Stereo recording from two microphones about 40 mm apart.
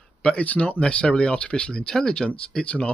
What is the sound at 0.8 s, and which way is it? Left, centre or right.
Speech, left.